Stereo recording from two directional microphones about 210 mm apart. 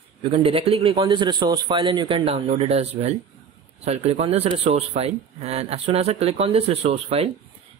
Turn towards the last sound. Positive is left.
turn(degrees=-30)  # may be behind; listen again after turning